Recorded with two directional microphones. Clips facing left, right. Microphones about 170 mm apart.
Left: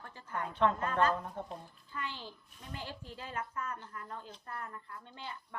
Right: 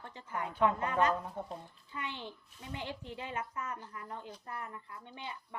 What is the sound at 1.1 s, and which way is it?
Speech, 5° right (ahead or behind).